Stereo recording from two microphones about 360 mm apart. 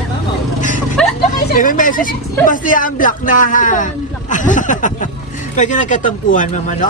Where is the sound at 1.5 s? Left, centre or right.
Left.